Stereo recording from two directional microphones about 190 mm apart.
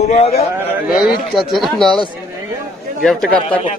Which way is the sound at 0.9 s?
50° left (ahead or behind).